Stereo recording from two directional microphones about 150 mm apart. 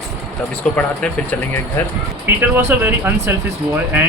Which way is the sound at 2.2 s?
15° right (ahead or behind).